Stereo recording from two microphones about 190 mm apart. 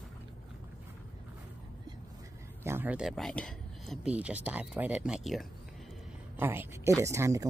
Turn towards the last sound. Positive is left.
turn(degrees=-15)  # may be behind; listen again after turning